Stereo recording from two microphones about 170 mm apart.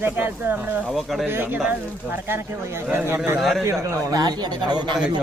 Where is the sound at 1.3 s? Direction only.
10° right (ahead or behind).